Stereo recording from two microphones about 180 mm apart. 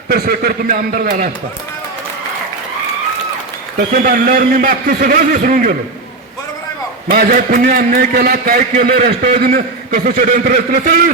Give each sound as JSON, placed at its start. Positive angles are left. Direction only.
{"t": 0.1, "sound": "a man's voice", "side_deg": -60}
{"t": 3.9, "sound": "a man's voice", "side_deg": -55}
{"t": 7.1, "sound": "a man's voice", "side_deg": -50}